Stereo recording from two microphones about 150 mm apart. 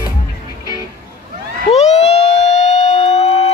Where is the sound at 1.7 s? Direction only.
45° left (ahead or behind).